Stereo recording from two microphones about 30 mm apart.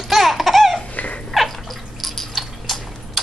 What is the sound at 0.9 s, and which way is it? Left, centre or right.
Laughter, left.